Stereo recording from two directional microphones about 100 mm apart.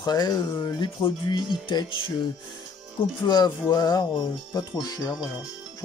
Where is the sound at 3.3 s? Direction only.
45° left (ahead or behind).